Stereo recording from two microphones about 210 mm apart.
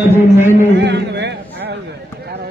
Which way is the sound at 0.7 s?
55° right (ahead or behind).